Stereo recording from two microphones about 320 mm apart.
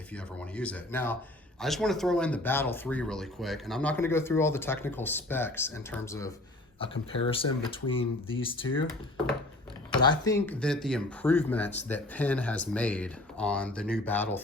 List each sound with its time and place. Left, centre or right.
0.1 s speech: centre
10.0 s speech: centre